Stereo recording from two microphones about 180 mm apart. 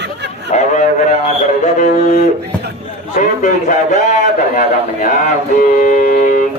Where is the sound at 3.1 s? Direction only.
45° left (ahead or behind).